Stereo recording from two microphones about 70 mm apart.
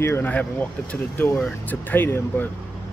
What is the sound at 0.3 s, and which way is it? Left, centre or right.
Speech, left.